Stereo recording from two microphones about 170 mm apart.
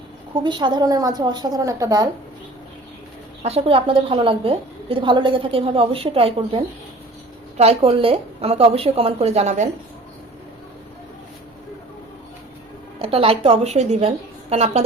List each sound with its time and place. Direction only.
0.4 s a woman's voice: 25° right (ahead or behind)
3.4 s a woman's voice: 35° right (ahead or behind)
7.6 s a woman's voice: 35° right (ahead or behind)
13.0 s a woman's voice: 35° right (ahead or behind)